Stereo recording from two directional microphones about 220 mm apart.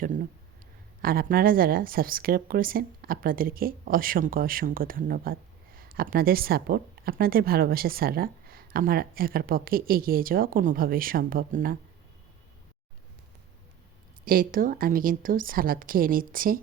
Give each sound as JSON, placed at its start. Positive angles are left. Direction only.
{"t": 1.0, "sound": "speech", "side_deg": -40}
{"t": 14.3, "sound": "speech", "side_deg": -40}